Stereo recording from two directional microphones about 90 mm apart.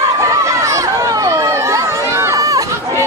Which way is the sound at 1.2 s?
35° right (ahead or behind).